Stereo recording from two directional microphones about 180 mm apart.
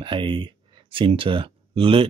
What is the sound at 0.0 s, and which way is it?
Speech, 25° right (ahead or behind).